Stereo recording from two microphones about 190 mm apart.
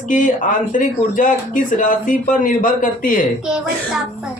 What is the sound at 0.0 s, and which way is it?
A man's voice, 40° left (ahead or behind).